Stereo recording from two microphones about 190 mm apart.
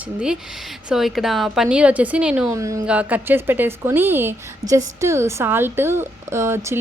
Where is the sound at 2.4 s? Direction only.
15° right (ahead or behind).